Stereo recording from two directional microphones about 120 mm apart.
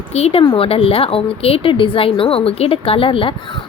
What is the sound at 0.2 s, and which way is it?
Speech, 50° left (ahead or behind).